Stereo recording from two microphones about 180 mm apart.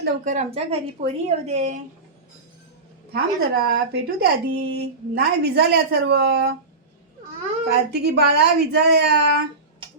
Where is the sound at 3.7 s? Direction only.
65° right (ahead or behind).